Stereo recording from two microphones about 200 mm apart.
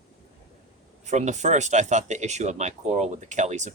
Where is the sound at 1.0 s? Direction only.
35° right (ahead or behind).